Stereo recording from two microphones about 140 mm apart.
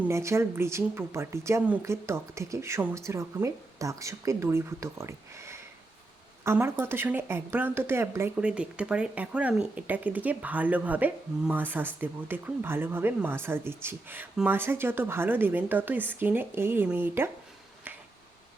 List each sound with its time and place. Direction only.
0.1 s speech: 20° right (ahead or behind)